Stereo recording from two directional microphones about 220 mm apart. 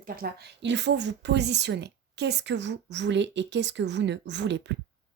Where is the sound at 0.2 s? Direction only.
50° right (ahead or behind).